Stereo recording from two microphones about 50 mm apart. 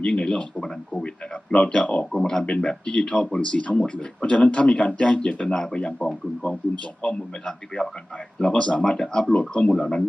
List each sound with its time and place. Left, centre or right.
0.0 s speech: centre
2.2 s a man's voice: centre